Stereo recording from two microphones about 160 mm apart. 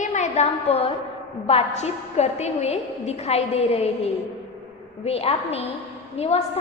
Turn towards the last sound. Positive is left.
turn(degrees=40)  # may be behind; listen again after turning